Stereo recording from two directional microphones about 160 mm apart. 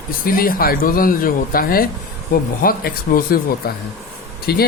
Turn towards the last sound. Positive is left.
turn(degrees=75)  # may be behind; listen again after turning